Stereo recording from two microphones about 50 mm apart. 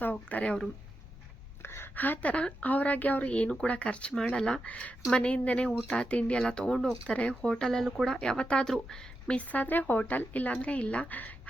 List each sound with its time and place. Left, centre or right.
0.0 s a sound: left
1.6 s a sound: left
2.0 s a woman's voice: left
2.3 s a woman's voice: left
4.1 s speech: centre
4.6 s a woman's voice: left; by 7.2 s centre
7.2 s speech: centre
9.3 s a woman's voice: left